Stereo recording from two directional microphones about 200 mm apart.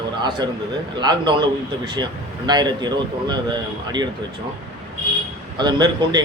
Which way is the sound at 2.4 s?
20° right (ahead or behind).